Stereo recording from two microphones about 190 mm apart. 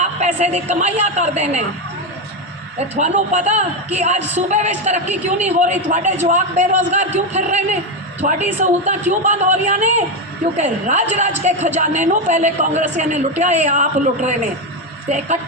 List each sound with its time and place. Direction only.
0.0 s a woman's voice: 35° right (ahead or behind)
2.9 s a woman's voice: 35° right (ahead or behind)